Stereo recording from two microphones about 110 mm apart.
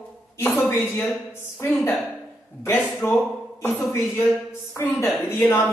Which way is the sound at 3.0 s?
15° left (ahead or behind).